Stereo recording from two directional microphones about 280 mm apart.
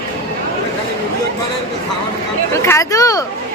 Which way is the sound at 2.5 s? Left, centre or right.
Centre.